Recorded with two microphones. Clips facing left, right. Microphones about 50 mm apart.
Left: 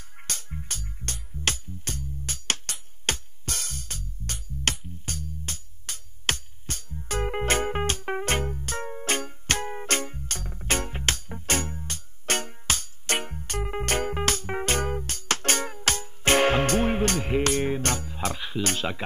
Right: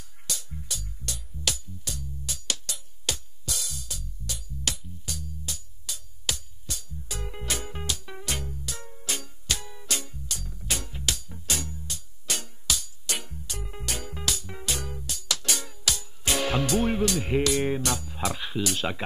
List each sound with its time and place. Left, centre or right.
0.3 s music: left
17.4 s speech: left
18.8 s speech: centre